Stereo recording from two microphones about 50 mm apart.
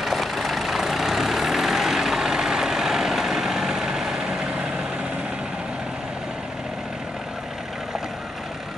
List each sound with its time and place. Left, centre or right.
0.0 s vehicle: centre